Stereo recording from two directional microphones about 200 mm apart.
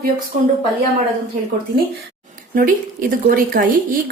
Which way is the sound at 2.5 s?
45° right (ahead or behind).